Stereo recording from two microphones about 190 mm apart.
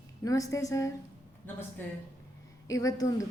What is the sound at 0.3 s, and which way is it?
A woman's voice, 15° left (ahead or behind).